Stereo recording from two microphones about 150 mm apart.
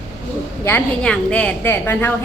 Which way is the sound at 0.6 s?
15° left (ahead or behind).